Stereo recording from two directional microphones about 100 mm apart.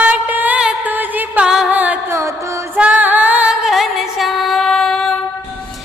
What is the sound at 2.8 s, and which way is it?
Female singing, 15° right (ahead or behind).